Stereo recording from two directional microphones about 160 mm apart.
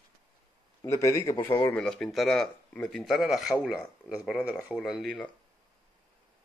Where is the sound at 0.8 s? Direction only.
20° left (ahead or behind).